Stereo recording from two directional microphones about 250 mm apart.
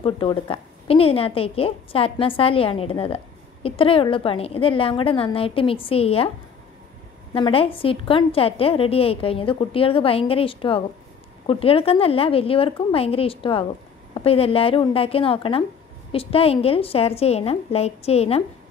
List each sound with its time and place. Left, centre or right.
0.0 s a woman's voice: left
7.3 s a woman's voice: left